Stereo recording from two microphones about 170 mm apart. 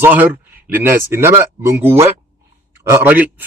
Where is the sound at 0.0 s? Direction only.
10° right (ahead or behind).